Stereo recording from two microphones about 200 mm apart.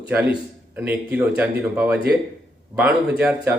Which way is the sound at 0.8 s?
5° right (ahead or behind).